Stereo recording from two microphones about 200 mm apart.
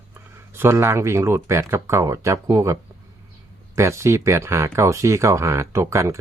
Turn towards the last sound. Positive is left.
turn(degrees=-15)  # may be behind; listen again after turning